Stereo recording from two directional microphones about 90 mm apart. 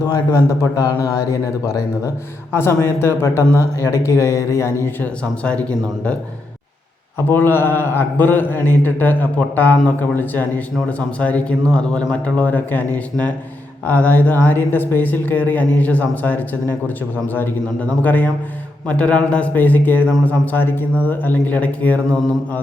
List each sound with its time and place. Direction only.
0.0 s a man's voice: 45° left (ahead or behind)
2.5 s a man's voice: 30° left (ahead or behind)
5.4 s a man's voice: 15° left (ahead or behind)
7.3 s a man's voice: 25° left (ahead or behind)